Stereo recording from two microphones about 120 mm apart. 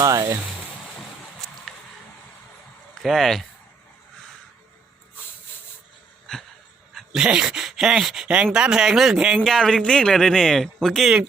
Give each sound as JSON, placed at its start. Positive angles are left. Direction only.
{"t": 0.0, "sound": "speech", "side_deg": -30}
{"t": 0.9, "sound": "a sound", "side_deg": 5}
{"t": 2.9, "sound": "speech", "side_deg": 0}
{"t": 6.9, "sound": "speech", "side_deg": -5}